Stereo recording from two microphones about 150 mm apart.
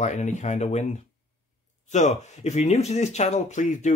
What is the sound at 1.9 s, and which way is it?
Speech, 50° left (ahead or behind).